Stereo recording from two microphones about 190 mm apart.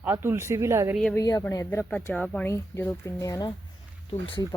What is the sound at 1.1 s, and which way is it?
Speech, 15° left (ahead or behind).